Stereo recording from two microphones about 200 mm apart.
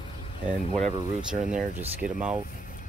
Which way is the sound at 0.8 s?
5° right (ahead or behind).